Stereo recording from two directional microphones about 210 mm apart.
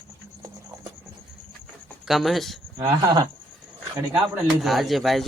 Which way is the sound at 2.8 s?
15° right (ahead or behind).